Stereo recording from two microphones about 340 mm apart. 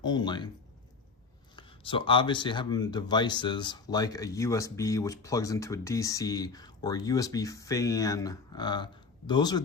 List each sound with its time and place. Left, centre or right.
0.0 s speech: centre
1.5 s speech: centre